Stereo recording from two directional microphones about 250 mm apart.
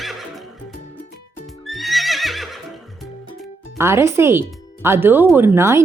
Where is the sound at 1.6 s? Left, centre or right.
Centre.